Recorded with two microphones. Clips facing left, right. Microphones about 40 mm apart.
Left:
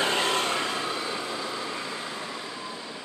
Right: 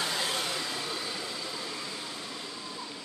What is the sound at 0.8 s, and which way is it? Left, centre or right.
Vehicle, left.